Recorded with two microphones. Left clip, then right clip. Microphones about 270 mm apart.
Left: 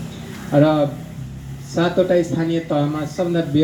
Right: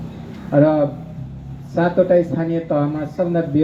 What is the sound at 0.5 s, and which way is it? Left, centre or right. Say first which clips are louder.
Speech: right 1 dB; left.